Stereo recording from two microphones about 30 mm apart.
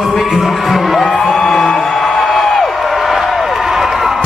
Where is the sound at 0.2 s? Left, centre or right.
Centre.